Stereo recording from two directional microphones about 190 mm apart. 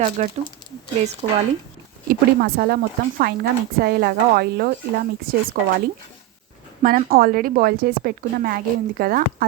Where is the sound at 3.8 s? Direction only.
55° right (ahead or behind).